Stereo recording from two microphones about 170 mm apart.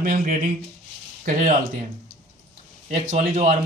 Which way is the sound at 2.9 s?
45° right (ahead or behind).